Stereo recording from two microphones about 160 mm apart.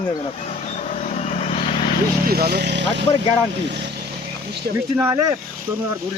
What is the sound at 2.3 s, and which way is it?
Speech, 80° right.